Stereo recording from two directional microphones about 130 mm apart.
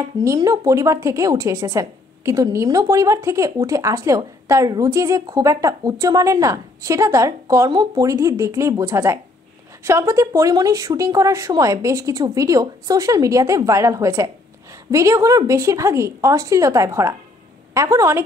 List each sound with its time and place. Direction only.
0.2 s a woman's voice: 25° right (ahead or behind)